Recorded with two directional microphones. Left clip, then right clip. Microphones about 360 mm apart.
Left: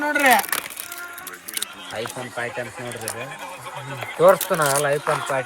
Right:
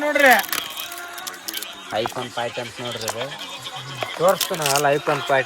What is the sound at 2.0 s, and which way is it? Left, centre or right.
Speech, centre.